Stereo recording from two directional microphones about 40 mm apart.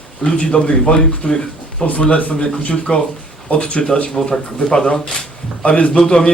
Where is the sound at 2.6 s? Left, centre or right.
Left.